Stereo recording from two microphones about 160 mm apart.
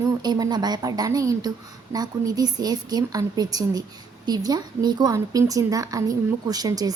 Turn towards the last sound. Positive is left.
turn(degrees=-20)  # may be behind; listen again after turning